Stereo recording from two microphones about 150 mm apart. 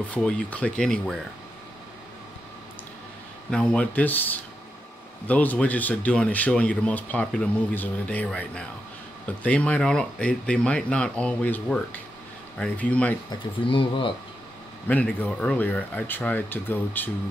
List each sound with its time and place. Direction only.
0.1 s speech: 10° left (ahead or behind)
3.4 s speech: 5° left (ahead or behind)
13.3 s speech: 35° left (ahead or behind)
14.9 s speech: 10° left (ahead or behind)